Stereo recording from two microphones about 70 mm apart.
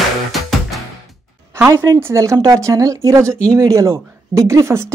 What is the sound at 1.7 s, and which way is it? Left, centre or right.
Speech, right.